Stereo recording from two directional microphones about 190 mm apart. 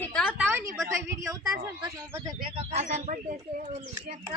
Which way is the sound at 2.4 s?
35° right (ahead or behind).